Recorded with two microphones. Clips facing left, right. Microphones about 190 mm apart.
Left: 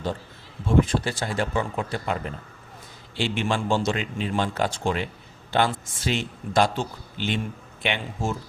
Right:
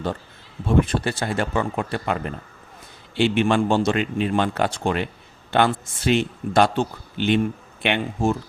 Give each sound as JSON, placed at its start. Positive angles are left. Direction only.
{"t": 0.8, "sound": "speech", "side_deg": -60}